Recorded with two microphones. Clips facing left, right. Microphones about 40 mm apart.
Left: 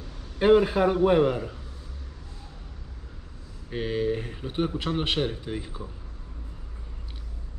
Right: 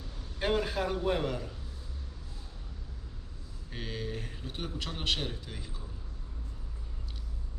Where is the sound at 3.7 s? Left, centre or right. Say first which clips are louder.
Left 12 dB; left.